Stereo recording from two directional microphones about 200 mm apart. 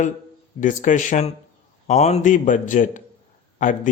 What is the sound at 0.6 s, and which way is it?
A man's voice, 40° left (ahead or behind).